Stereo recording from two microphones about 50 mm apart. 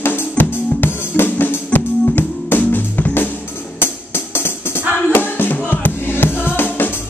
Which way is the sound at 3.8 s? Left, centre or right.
Left.